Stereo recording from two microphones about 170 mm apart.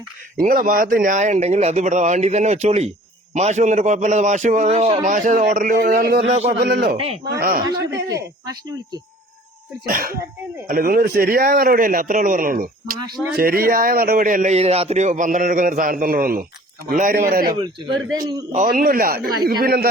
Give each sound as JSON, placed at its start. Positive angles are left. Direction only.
{"t": 0.3, "sound": "speech", "side_deg": -55}
{"t": 6.2, "sound": "a man's voice", "side_deg": -40}
{"t": 6.6, "sound": "speech", "side_deg": -75}
{"t": 6.9, "sound": "a man's voice", "side_deg": -35}
{"t": 7.3, "sound": "speech", "side_deg": -60}
{"t": 8.1, "sound": "speech", "side_deg": -20}
{"t": 9.8, "sound": "speech", "side_deg": -60}
{"t": 18.2, "sound": "speech", "side_deg": -20}
{"t": 18.5, "sound": "speech", "side_deg": -55}